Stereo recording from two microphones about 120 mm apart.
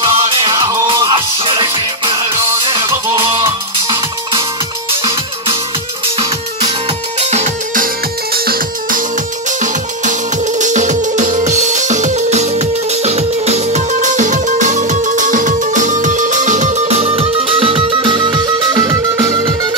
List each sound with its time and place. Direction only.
0.0 s music: 45° right (ahead or behind)
2.7 s music: 25° right (ahead or behind)
7.2 s music: 70° right (ahead or behind)
9.6 s music: 90° right; by 19.7 s 35° right (ahead or behind)